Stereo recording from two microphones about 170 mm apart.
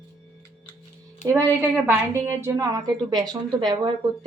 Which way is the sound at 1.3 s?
15° right (ahead or behind).